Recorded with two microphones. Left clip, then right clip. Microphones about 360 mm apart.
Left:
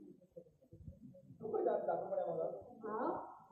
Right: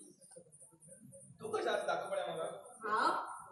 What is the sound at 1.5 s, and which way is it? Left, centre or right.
Hiccup, right.